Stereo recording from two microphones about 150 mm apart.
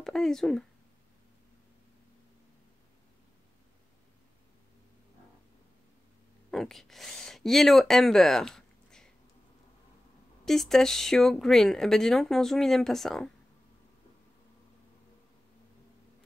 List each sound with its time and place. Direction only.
0.0 s speech: 5° left (ahead or behind)
6.5 s speech: centre (ahead or behind)
10.4 s speech: centre (ahead or behind)